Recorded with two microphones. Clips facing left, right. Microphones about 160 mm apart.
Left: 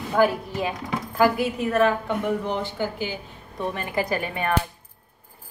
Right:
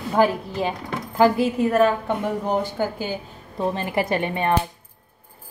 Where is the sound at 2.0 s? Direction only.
45° right (ahead or behind).